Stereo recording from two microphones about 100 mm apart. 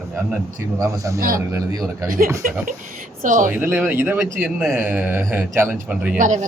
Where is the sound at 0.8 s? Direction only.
35° right (ahead or behind).